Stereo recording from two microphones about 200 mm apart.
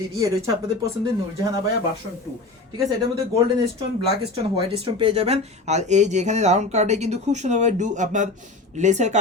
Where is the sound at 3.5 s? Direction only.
25° right (ahead or behind).